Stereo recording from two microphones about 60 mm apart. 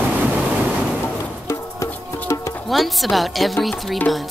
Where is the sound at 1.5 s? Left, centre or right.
Left.